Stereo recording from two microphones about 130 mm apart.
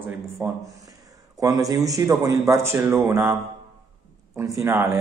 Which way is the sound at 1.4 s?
25° right (ahead or behind).